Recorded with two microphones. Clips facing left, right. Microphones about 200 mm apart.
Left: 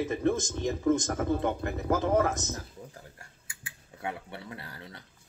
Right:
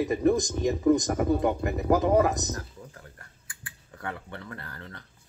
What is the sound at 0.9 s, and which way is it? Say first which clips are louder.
Speech: right 4 dB; 15° right (ahead or behind).